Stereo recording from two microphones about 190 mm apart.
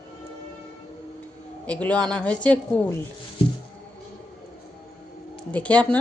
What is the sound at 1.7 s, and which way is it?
A woman's voice, 5° left (ahead or behind).